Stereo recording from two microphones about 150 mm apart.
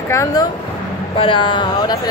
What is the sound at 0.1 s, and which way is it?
Speech, 25° left (ahead or behind).